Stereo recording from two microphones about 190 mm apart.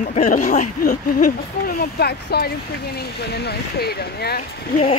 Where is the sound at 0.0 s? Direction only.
40° left (ahead or behind); by 4.4 s 55° left (ahead or behind).